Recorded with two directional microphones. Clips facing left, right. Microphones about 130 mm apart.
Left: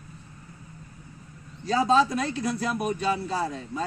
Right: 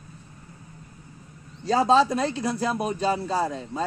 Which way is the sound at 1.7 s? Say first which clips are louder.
Right 2 dB; 35° right (ahead or behind).